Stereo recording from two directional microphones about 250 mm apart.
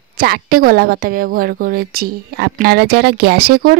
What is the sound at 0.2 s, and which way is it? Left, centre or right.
A woman's voice, right.